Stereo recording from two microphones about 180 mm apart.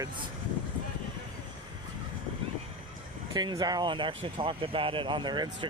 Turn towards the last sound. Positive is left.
turn(degrees=-25)  # may be behind; listen again after turning